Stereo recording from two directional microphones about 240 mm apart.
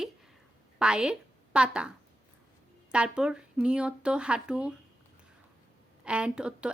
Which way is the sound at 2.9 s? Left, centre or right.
Centre.